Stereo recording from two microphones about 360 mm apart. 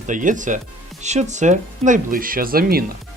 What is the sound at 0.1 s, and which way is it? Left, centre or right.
Speech, right.